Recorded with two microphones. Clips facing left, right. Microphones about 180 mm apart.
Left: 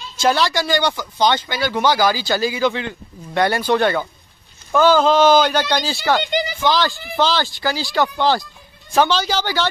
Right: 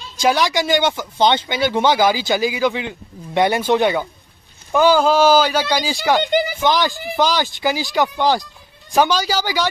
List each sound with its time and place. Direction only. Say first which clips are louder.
0.2 s speech: right 1 dB; 15° right (ahead or behind)
6.2 s speech: right 4 dB; 50° right (ahead or behind)
6.6 s speech: right 1 dB; 20° right (ahead or behind)